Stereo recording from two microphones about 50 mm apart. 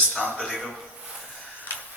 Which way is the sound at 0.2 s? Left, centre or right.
Centre.